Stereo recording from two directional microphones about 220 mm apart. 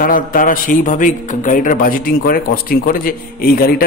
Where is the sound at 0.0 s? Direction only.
40° left (ahead or behind).